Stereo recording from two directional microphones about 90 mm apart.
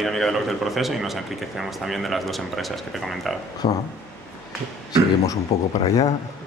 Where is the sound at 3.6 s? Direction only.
80° left.